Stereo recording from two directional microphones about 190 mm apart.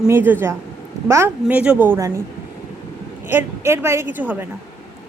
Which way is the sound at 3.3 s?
15° right (ahead or behind).